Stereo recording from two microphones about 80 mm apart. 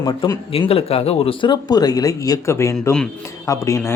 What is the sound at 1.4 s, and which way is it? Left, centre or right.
Speech, left.